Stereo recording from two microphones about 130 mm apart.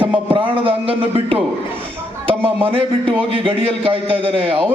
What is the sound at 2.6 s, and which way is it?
A man's voice, 45° right (ahead or behind).